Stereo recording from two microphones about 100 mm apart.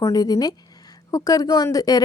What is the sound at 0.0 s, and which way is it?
A woman's voice, 40° left (ahead or behind).